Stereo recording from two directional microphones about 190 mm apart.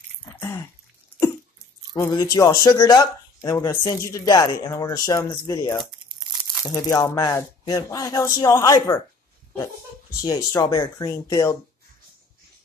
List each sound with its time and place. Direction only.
0.2 s throat clearing: 15° left (ahead or behind)
2.0 s speech: 20° left (ahead or behind)
10.2 s speech: 20° left (ahead or behind)